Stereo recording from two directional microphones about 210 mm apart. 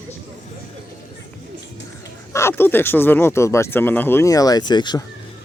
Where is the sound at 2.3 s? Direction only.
15° left (ahead or behind).